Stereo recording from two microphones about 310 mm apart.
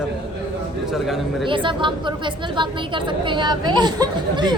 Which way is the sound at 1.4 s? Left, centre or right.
Centre.